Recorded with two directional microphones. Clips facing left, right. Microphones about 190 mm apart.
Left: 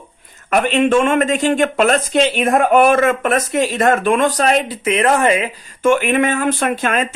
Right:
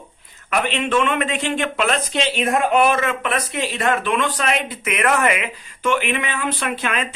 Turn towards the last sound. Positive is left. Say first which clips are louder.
# left 6 dB
turn(degrees=45)  # may be behind; listen again after turning